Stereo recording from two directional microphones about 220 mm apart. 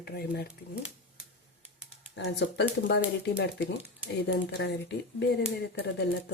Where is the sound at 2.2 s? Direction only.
55° left (ahead or behind).